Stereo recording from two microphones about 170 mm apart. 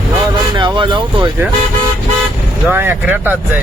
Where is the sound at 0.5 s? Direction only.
25° right (ahead or behind).